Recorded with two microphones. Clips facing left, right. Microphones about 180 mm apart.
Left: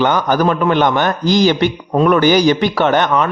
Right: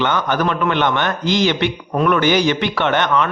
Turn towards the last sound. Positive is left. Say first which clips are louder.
# left 3 dB
turn(degrees=40)  # may be behind; listen again after turning